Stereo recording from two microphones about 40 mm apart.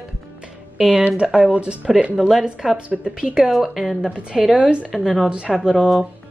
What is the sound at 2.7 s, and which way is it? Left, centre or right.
Speech, right.